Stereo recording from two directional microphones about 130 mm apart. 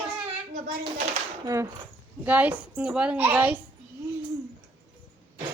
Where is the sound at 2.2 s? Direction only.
10° right (ahead or behind).